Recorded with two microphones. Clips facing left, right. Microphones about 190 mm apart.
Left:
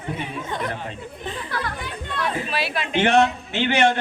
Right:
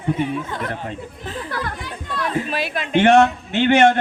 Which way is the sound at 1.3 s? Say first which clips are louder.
Right 3 dB; 50° right (ahead or behind).